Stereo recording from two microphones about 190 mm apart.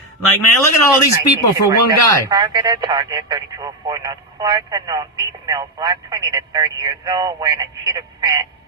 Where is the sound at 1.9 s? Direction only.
20° right (ahead or behind).